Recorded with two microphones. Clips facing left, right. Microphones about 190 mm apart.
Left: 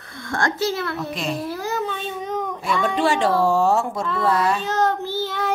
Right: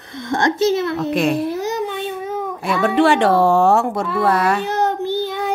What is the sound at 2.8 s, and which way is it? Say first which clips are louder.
Speech: right 6 dB; 65° right (ahead or behind).